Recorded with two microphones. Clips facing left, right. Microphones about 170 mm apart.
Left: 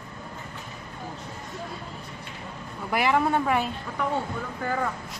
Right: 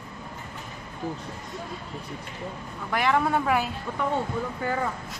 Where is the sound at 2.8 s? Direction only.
5° left (ahead or behind).